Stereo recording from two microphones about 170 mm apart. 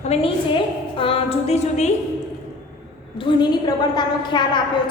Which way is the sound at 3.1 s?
25° left (ahead or behind).